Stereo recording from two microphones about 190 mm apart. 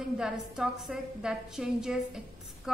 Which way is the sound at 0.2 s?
5° right (ahead or behind).